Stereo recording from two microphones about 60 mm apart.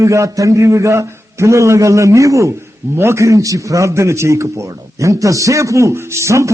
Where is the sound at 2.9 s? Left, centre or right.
Right.